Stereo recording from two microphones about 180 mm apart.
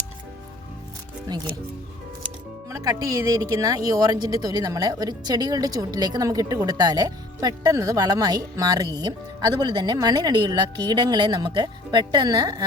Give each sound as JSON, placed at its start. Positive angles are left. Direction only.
{"t": 2.6, "sound": "speech", "side_deg": -20}